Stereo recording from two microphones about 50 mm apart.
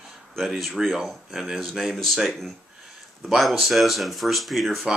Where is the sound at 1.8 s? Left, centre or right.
Centre.